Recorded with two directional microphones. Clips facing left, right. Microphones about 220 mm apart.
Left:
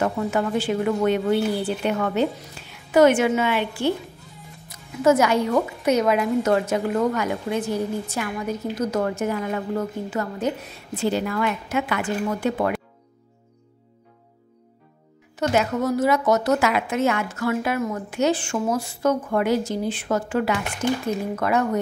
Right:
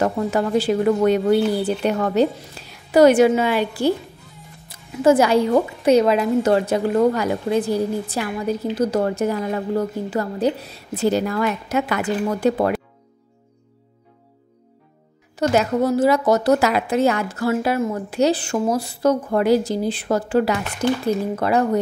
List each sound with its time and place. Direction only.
0.0 s a woman's voice: 35° right (ahead or behind)
15.3 s a woman's voice: 35° right (ahead or behind)